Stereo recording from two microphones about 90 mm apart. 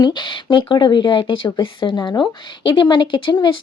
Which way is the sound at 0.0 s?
60° left (ahead or behind).